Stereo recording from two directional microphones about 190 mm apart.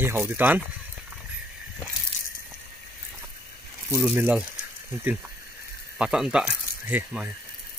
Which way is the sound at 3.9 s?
10° right (ahead or behind).